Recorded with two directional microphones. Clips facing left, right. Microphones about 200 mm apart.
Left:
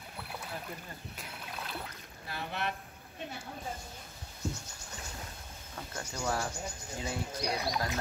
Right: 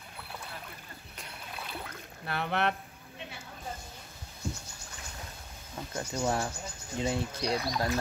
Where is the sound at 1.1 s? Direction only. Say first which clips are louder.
Right 3 dB; 5° left (ahead or behind).